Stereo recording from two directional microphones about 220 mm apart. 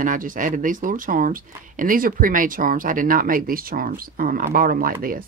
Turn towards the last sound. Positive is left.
turn(degrees=-40)  # may be behind; listen again after turning